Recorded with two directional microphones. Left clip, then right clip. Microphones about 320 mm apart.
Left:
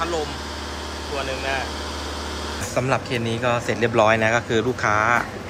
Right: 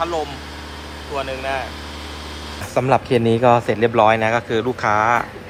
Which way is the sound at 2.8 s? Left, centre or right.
Centre.